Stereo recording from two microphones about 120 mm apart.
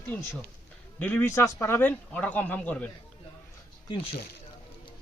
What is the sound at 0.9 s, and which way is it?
Speech, 15° left (ahead or behind).